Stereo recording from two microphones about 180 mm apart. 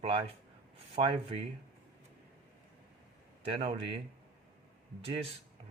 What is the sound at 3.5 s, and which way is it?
Speech, 35° right (ahead or behind).